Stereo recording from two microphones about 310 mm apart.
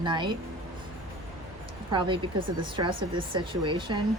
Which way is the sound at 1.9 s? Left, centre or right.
Centre.